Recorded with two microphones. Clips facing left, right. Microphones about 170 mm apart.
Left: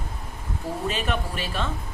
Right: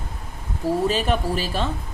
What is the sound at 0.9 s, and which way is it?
Speech, 35° right (ahead or behind).